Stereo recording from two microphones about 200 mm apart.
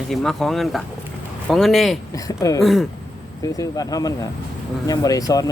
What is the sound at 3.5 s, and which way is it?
Speech, 15° left (ahead or behind).